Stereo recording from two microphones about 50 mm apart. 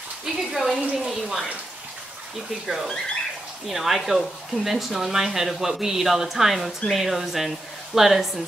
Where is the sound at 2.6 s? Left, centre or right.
Centre.